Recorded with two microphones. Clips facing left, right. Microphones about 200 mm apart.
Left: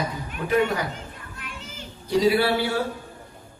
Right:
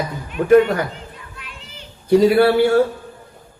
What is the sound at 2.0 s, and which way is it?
Speech, 55° right (ahead or behind).